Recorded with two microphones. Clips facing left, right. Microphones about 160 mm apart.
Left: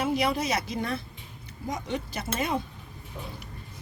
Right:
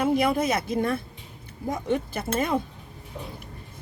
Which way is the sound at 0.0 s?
55° right (ahead or behind).